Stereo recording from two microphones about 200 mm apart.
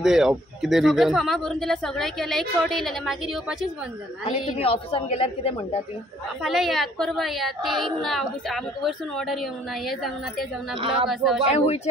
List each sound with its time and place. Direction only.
0.0 s speech: 5° right (ahead or behind)
4.3 s a woman's voice: 30° left (ahead or behind)
6.4 s speech: centre (ahead or behind)
10.8 s speech: 25° right (ahead or behind)
11.1 s speech: centre (ahead or behind)
11.6 s speech: 30° left (ahead or behind)